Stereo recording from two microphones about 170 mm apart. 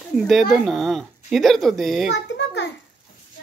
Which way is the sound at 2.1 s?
90° left.